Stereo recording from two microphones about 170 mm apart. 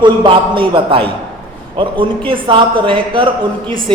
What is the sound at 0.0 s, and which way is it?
A man's voice, 30° right (ahead or behind).